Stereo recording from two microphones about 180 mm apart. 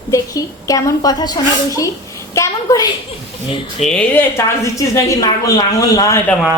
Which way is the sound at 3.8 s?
5° left (ahead or behind).